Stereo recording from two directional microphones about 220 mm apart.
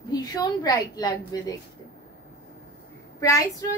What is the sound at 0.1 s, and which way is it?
A woman's voice, 15° left (ahead or behind).